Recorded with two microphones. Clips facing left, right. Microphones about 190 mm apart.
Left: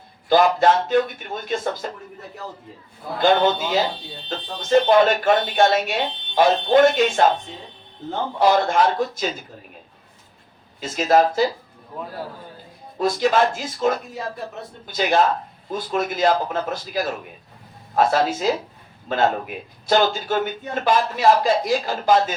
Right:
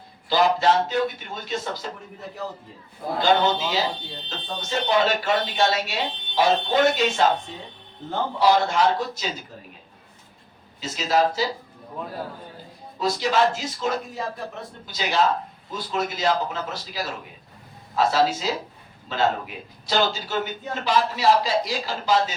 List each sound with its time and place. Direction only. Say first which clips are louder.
0.3 s speech: left 4 dB; 50° left (ahead or behind)
3.2 s speech: left 3 dB; 50° left (ahead or behind)
8.4 s speech: left 2 dB; 50° left (ahead or behind)
10.8 s speech: left 5 dB; 50° left (ahead or behind)
13.0 s a man's voice: left 3 dB; 50° left (ahead or behind)